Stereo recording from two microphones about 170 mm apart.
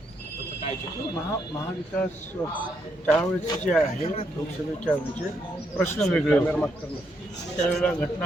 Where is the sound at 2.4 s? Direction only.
10° left (ahead or behind).